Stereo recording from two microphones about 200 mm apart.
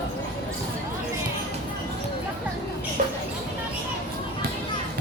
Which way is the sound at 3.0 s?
40° right (ahead or behind).